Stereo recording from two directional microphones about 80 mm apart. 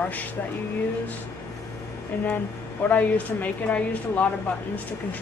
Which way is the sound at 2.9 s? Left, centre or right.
Centre.